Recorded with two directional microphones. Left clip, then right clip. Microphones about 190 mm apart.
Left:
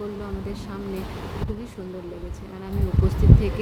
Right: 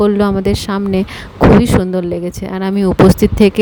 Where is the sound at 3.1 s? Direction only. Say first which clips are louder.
Right 15 dB; 50° right (ahead or behind).